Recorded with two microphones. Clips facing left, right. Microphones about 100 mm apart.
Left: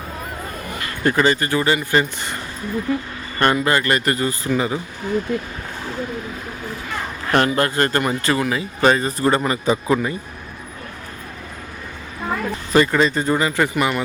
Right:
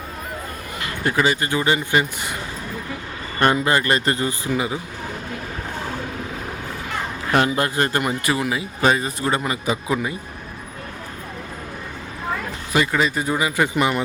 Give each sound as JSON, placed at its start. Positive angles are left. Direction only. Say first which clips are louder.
{"t": 1.0, "sound": "speech", "louder": "left 3 dB", "side_deg": -10}
{"t": 3.4, "sound": "speech", "louder": "left 1 dB", "side_deg": -20}
{"t": 7.3, "sound": "speech", "louder": "left 2 dB", "side_deg": -10}
{"t": 12.7, "sound": "speech", "louder": "left 4 dB", "side_deg": -5}
{"t": 13.7, "sound": "speech", "louder": "even", "side_deg": -20}